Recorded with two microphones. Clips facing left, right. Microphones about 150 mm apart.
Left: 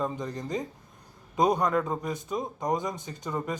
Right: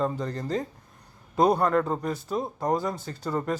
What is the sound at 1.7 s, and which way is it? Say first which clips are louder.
Speech: right 3 dB; 10° left (ahead or behind).